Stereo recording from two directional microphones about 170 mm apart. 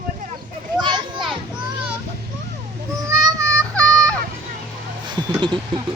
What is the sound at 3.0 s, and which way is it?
Child singing, 15° right (ahead or behind).